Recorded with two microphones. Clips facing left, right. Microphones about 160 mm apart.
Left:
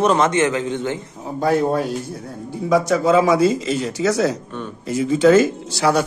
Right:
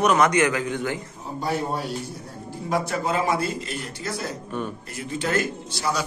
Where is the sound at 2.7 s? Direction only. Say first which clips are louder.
Left 9 dB; 90° left.